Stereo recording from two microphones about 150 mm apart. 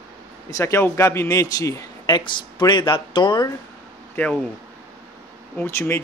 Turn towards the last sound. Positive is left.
turn(degrees=15)  # may be behind; listen again after turning